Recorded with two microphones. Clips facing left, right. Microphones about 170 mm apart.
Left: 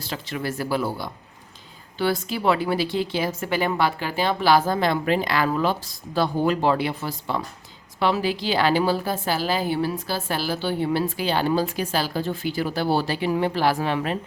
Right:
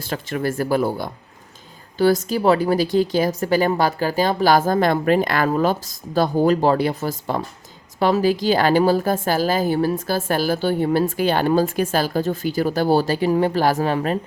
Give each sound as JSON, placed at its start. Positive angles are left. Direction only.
{"t": 0.0, "sound": "a woman's voice", "side_deg": -50}